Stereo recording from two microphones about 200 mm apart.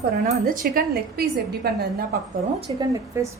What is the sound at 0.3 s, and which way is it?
Speech, 45° right (ahead or behind).